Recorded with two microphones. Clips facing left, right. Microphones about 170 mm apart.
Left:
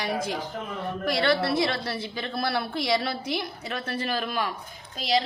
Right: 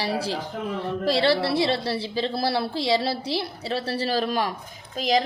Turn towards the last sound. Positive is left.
turn(degrees=-45)  # may be behind; listen again after turning